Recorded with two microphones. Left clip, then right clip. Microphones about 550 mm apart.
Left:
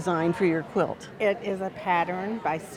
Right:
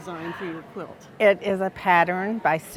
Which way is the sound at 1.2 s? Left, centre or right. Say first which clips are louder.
Right 7 dB; right.